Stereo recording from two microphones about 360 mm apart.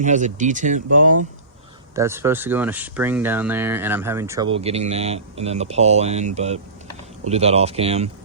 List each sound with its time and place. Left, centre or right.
0.0 s speech: centre
2.0 s speech: centre